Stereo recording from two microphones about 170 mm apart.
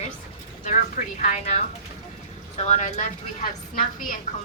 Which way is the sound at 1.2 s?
40° left (ahead or behind).